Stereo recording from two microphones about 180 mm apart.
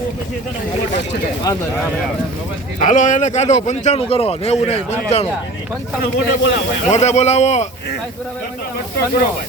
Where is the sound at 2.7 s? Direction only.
45° left (ahead or behind).